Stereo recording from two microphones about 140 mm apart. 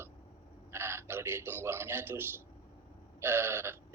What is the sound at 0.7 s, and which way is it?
A man's voice, 20° right (ahead or behind).